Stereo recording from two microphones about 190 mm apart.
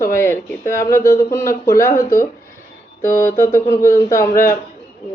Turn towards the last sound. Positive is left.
turn(degrees=15)  # may be behind; listen again after turning